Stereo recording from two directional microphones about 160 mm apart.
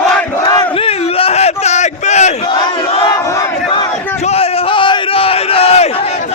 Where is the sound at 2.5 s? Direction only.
30° left (ahead or behind).